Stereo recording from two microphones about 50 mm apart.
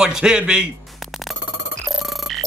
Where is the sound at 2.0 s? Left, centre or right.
Centre.